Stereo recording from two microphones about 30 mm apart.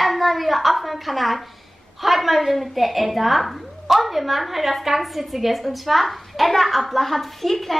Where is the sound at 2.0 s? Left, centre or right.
Centre.